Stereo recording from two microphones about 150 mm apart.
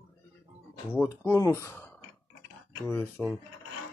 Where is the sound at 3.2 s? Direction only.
Centre (ahead or behind).